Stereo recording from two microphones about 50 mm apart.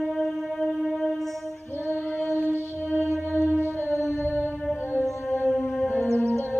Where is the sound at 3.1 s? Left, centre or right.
Right.